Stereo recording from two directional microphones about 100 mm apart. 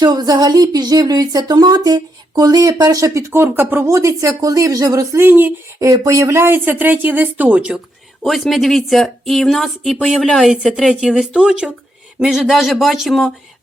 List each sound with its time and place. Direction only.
0.0 s speech: 40° right (ahead or behind); by 5.5 s 20° right (ahead or behind)
5.8 s speech: 30° right (ahead or behind); by 7.8 s 10° right (ahead or behind)
8.2 s speech: centre (ahead or behind)